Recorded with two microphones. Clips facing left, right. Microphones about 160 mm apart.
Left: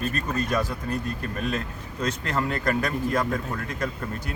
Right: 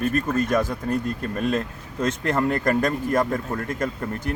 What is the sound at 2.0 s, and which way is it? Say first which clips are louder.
Speech: right 5 dB; 50° right (ahead or behind).